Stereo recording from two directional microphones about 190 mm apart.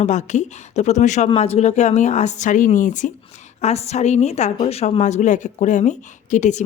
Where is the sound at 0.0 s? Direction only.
40° left (ahead or behind).